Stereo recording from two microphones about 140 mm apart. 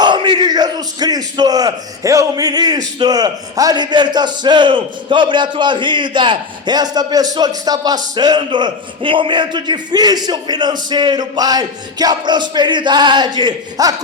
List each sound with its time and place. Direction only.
0.0 s speech: 35° right (ahead or behind)